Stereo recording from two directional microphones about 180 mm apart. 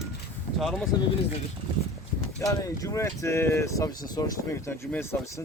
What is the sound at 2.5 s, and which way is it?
Speech, 15° left (ahead or behind).